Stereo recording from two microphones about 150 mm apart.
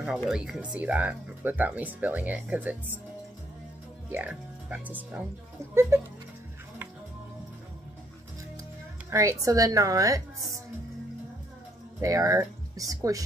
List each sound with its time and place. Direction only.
0.2 s speech: 5° right (ahead or behind)
4.1 s speech: 10° right (ahead or behind)
9.1 s a woman's voice: 20° right (ahead or behind)
12.0 s speech: 20° right (ahead or behind)